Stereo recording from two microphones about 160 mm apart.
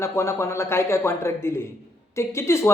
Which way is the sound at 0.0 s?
15° left (ahead or behind).